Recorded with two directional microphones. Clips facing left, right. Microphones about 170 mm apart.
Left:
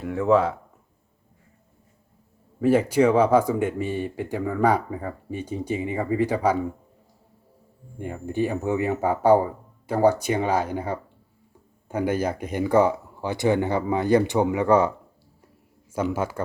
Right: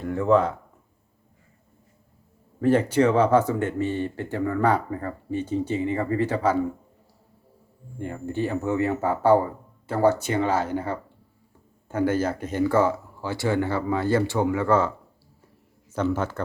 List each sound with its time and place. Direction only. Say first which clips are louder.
0.0 s speech: even; 5° left (ahead or behind)
2.6 s speech: left 1 dB; 10° left (ahead or behind)
7.9 s speech: left 2 dB; 15° left (ahead or behind)